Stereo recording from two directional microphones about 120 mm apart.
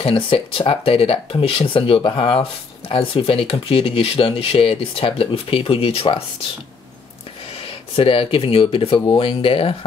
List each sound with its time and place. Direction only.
0.0 s speech: 50° left (ahead or behind)
7.6 s speech: 50° left (ahead or behind)